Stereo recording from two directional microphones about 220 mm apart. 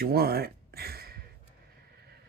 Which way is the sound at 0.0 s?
45° right (ahead or behind).